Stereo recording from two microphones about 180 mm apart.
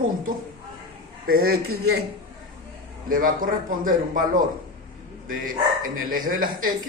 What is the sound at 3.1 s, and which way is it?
Speech, 50° right (ahead or behind).